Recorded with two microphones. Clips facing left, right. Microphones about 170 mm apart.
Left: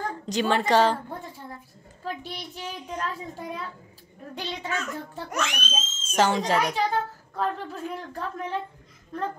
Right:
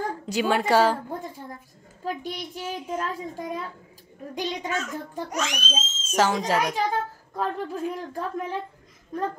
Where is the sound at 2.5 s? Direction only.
5° right (ahead or behind).